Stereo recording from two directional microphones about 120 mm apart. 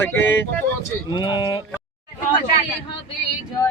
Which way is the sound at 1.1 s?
40° left (ahead or behind).